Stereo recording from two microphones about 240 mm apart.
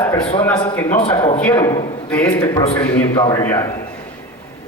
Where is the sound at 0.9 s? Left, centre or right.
Left.